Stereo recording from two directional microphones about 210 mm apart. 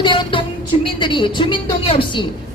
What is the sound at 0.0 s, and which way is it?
A woman's voice, 25° left (ahead or behind).